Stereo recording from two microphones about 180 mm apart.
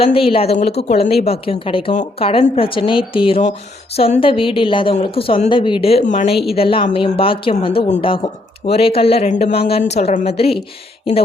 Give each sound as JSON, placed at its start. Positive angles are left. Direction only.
{"t": 0.0, "sound": "a woman's voice", "side_deg": 30}